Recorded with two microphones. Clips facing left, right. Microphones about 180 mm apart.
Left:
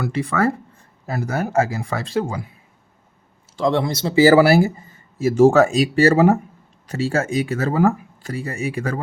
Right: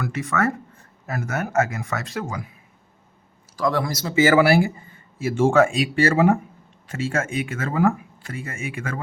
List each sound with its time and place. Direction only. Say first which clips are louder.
0.0 s speech: left 3 dB; 30° left (ahead or behind)
3.5 s speech: left 3 dB; 25° left (ahead or behind)